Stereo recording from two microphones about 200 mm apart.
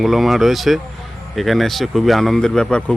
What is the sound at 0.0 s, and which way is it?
Speech, centre (ahead or behind).